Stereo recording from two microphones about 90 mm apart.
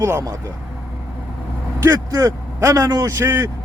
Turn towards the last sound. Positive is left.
turn(degrees=-30)  # may be behind; listen again after turning